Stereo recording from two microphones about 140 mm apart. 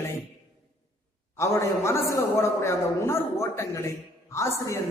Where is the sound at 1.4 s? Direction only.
20° left (ahead or behind).